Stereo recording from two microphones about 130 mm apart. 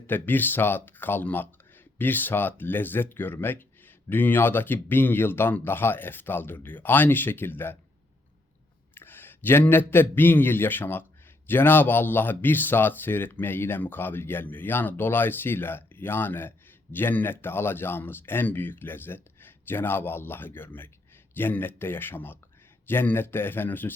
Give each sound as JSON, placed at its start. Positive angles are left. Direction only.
{"t": 0.1, "sound": "speech", "side_deg": 15}
{"t": 9.0, "sound": "a man's voice", "side_deg": 15}